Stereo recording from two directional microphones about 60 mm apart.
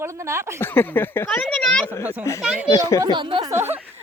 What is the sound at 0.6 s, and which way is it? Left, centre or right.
Speech, left.